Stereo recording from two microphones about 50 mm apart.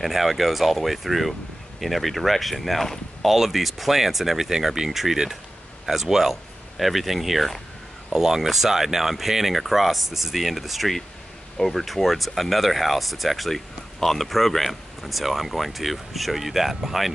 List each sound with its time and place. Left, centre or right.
0.0 s a man's voice: centre